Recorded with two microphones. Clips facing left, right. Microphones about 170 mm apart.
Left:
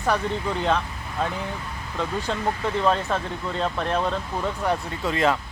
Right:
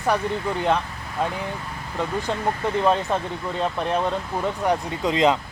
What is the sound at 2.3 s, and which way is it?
Speech, 15° right (ahead or behind).